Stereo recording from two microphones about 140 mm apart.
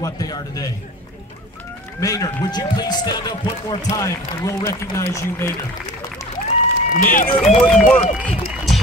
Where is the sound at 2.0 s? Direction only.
25° left (ahead or behind).